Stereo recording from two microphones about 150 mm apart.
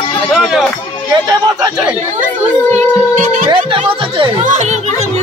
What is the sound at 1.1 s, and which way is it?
Speech, 25° right (ahead or behind).